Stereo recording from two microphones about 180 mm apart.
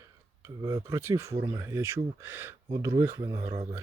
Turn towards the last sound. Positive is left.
turn(degrees=-35)  # may be behind; listen again after turning